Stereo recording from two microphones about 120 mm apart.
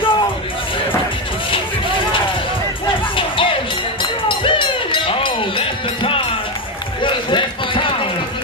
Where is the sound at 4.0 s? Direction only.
45° left (ahead or behind).